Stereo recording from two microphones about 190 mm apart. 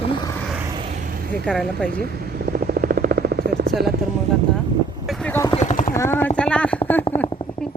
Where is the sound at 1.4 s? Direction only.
5° left (ahead or behind).